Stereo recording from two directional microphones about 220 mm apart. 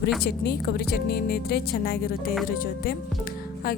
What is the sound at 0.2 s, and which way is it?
Speech, 45° left (ahead or behind).